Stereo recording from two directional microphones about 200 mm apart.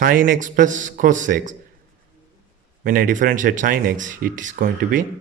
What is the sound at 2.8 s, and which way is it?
Speech, 45° right (ahead or behind).